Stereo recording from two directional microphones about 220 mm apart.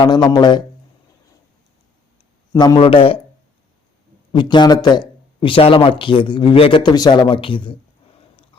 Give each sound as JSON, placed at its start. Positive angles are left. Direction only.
{"t": 0.0, "sound": "speech", "side_deg": 20}
{"t": 2.5, "sound": "speech", "side_deg": 20}
{"t": 4.3, "sound": "speech", "side_deg": 20}